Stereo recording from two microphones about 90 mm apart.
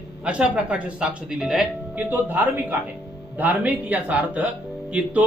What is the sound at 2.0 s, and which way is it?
A man's voice, 20° right (ahead or behind).